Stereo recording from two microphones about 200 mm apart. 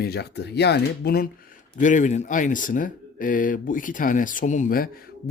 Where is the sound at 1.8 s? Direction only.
40° left (ahead or behind).